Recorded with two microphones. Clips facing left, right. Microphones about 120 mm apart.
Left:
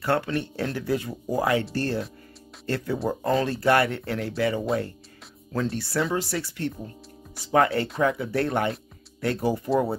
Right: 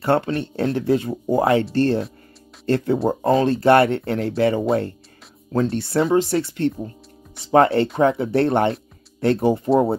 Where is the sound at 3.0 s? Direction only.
25° right (ahead or behind).